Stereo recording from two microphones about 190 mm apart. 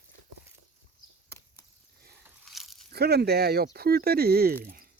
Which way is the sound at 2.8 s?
55° right (ahead or behind).